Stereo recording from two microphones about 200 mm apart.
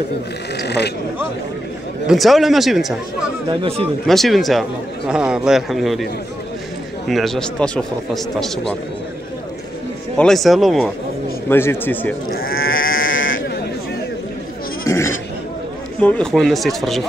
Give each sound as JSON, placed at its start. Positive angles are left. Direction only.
{"t": 0.6, "sound": "speech", "side_deg": 55}
{"t": 2.0, "sound": "speech", "side_deg": 0}
{"t": 3.4, "sound": "speech", "side_deg": -30}
{"t": 4.1, "sound": "speech", "side_deg": 0}
{"t": 7.1, "sound": "speech", "side_deg": 0}
{"t": 10.1, "sound": "speech", "side_deg": 0}
{"t": 11.4, "sound": "a man's voice", "side_deg": 10}
{"t": 12.3, "sound": "speech", "side_deg": 45}
{"t": 12.6, "sound": "sheep", "side_deg": 85}
{"t": 14.9, "sound": "bleat", "side_deg": 15}
{"t": 16.0, "sound": "speech", "side_deg": 5}